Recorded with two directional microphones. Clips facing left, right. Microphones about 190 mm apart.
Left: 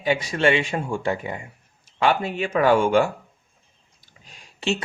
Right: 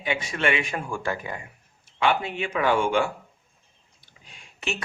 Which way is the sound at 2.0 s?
40° left (ahead or behind).